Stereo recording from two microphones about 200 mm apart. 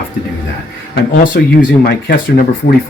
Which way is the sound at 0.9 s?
50° left (ahead or behind).